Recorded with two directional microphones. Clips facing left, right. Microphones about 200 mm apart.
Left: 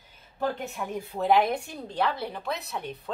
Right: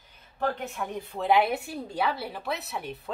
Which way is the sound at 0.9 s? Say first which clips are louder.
Left 1 dB; 5° left (ahead or behind).